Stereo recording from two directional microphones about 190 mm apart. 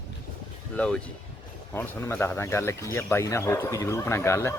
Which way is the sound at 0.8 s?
5° left (ahead or behind).